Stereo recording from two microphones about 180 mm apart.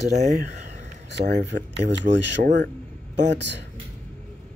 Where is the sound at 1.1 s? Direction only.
70° right (ahead or behind).